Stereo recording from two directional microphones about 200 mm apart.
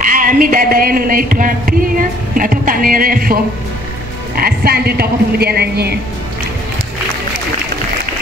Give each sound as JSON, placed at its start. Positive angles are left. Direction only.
{"t": 0.0, "sound": "music", "side_deg": -40}
{"t": 4.4, "sound": "music", "side_deg": -50}